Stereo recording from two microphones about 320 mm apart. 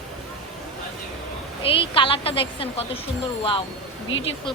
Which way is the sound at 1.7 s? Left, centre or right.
Centre.